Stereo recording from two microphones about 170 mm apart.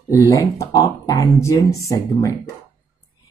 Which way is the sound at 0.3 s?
20° left (ahead or behind).